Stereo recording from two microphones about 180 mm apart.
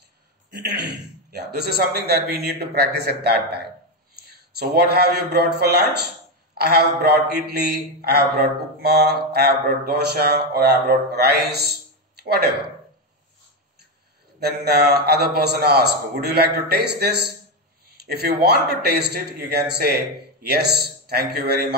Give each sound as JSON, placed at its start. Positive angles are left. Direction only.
{"t": 0.5, "sound": "a man's voice", "side_deg": -65}
{"t": 14.4, "sound": "a man's voice", "side_deg": -60}
{"t": 21.1, "sound": "a man's voice", "side_deg": -60}